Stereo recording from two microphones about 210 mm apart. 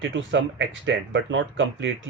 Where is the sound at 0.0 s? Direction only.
60° right (ahead or behind).